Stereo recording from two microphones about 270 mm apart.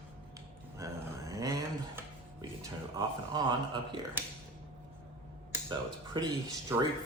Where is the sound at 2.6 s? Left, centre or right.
Centre.